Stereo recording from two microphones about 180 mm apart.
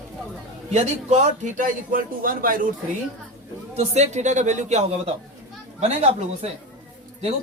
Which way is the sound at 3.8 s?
40° right (ahead or behind).